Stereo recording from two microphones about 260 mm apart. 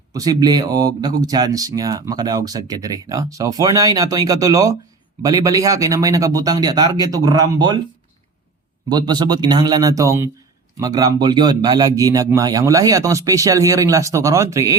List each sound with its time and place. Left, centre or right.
0.1 s speech: centre
8.9 s speech: centre